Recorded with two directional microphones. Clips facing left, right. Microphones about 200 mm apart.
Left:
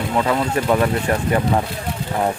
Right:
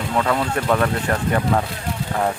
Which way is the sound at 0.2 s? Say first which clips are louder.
Left 1 dB; 10° left (ahead or behind).